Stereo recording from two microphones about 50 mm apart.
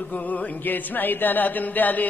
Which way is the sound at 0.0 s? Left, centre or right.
Left.